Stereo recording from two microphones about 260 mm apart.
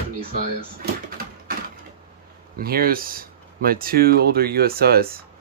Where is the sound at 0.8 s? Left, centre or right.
Right.